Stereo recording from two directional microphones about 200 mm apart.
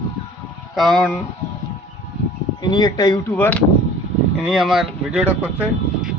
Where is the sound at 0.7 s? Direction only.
Centre (ahead or behind).